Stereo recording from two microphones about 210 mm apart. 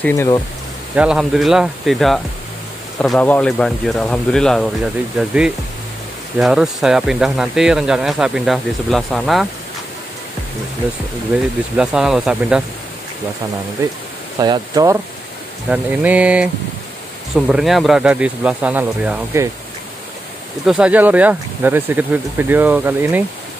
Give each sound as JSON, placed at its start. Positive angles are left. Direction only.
{"t": 0.0, "sound": "speech", "side_deg": 10}
{"t": 0.9, "sound": "speech", "side_deg": -5}
{"t": 6.4, "sound": "speech", "side_deg": 0}
{"t": 11.7, "sound": "speech", "side_deg": -5}
{"t": 13.8, "sound": "speech", "side_deg": -15}
{"t": 15.7, "sound": "speech", "side_deg": -5}
{"t": 17.5, "sound": "speech", "side_deg": 0}
{"t": 20.6, "sound": "speech", "side_deg": -5}